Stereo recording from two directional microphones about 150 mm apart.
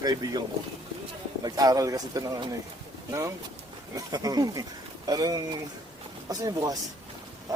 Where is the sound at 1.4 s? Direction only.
25° right (ahead or behind).